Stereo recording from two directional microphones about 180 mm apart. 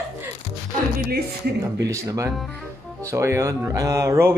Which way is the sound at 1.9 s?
15° right (ahead or behind).